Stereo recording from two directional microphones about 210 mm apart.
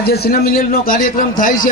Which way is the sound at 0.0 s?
50° left (ahead or behind).